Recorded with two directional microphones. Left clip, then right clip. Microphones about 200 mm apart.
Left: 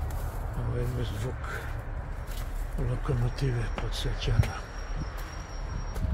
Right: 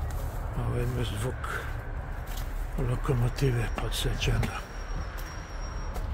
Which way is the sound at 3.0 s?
25° right (ahead or behind).